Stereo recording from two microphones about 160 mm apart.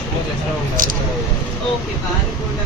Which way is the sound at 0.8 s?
60° right (ahead or behind).